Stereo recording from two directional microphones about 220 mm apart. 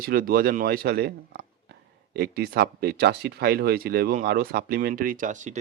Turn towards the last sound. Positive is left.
turn(degrees=-35)  # may be behind; listen again after turning